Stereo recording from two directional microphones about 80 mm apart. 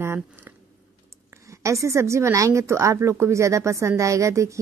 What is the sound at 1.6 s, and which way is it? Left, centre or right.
A woman's voice, right.